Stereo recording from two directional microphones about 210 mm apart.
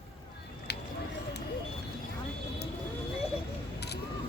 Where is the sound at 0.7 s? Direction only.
50° left (ahead or behind).